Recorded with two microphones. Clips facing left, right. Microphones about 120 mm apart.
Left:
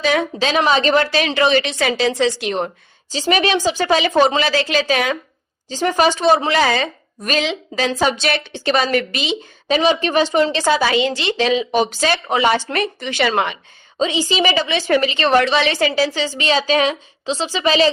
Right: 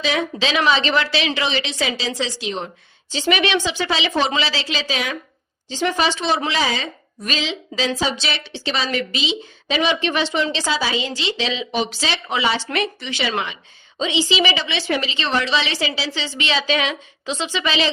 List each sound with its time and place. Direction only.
0.0 s a woman's voice: 50° left (ahead or behind)
3.1 s a woman's voice: 40° left (ahead or behind); by 5.1 s 55° left (ahead or behind)
5.6 s a woman's voice: 45° left (ahead or behind)
6.5 s a woman's voice: 60° left (ahead or behind)
14.0 s a woman's voice: 45° left (ahead or behind)